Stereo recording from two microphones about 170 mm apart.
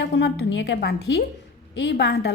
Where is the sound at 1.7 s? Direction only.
90° left; by 2.3 s 75° left (ahead or behind).